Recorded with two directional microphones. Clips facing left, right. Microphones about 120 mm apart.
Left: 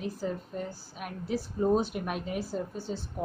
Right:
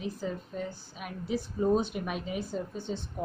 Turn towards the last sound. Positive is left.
turn(degrees=5)  # may be behind; listen again after turning